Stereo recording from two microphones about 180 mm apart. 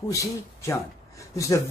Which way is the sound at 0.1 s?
15° left (ahead or behind).